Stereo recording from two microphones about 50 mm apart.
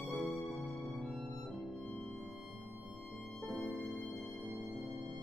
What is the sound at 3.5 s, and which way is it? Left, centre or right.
Music, centre.